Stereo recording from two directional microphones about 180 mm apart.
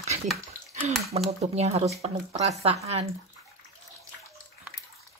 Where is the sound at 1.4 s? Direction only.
35° right (ahead or behind).